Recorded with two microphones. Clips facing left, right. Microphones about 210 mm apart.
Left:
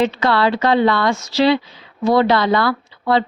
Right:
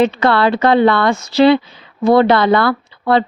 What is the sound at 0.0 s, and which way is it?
Speech, 60° right (ahead or behind).